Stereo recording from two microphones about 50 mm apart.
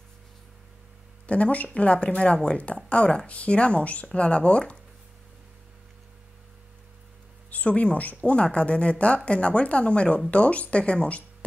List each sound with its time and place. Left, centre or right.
1.2 s speech: left
7.5 s speech: left